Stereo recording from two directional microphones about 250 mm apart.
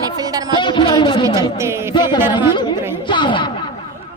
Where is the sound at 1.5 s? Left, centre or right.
Centre.